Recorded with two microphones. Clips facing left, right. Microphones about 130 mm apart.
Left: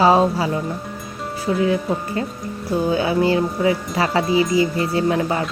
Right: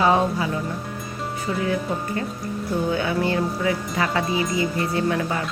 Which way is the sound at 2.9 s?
30° left (ahead or behind).